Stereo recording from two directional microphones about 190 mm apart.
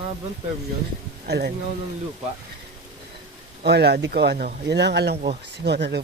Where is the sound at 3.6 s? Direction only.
60° right (ahead or behind).